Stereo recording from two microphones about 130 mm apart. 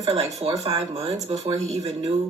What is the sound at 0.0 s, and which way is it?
Speech, 55° right (ahead or behind).